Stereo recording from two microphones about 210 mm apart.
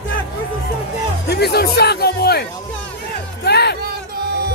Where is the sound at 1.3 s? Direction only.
50° left (ahead or behind).